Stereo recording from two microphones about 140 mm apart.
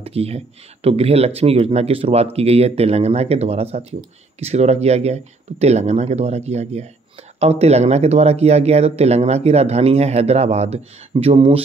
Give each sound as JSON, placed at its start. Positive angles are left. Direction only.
{"t": 0.0, "sound": "speech", "side_deg": -45}